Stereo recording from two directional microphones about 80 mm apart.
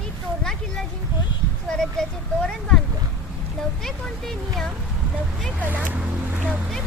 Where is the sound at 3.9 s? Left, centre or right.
Centre.